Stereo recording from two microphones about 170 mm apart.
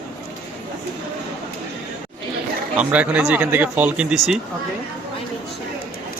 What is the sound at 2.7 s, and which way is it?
Speech, 5° right (ahead or behind).